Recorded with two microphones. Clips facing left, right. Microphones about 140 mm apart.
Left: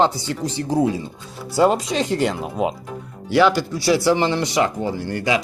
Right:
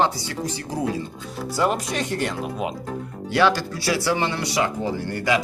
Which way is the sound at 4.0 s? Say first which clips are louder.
Left 5 dB; 25° left (ahead or behind).